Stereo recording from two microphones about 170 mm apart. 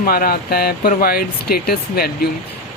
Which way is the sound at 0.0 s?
60° left (ahead or behind).